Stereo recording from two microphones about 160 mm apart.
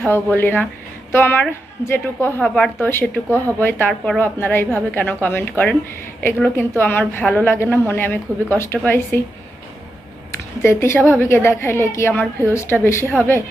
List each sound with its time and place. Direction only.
0.1 s a woman's voice: 15° left (ahead or behind)
10.6 s a woman's voice: 15° left (ahead or behind)